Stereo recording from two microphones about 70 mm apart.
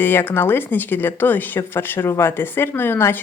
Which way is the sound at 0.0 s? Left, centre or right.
Left.